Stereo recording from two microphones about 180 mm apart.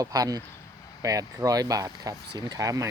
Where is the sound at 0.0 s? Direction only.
20° right (ahead or behind).